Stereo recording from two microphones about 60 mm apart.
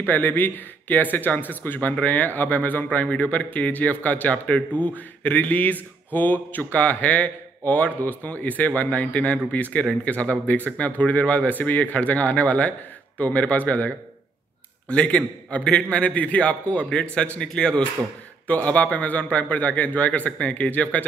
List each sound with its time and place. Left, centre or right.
0.0 s a man's voice: left